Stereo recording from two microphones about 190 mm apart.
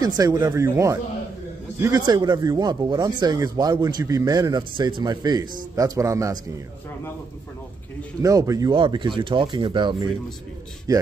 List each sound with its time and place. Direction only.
0.0 s a man's voice: 20° right (ahead or behind)
8.2 s a man's voice: 20° right (ahead or behind)